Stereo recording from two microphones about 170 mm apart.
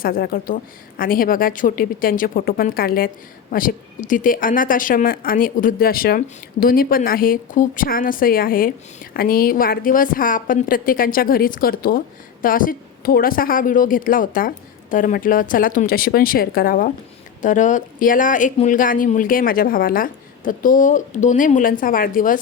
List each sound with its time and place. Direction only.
0.0 s a woman's voice: 60° left (ahead or behind)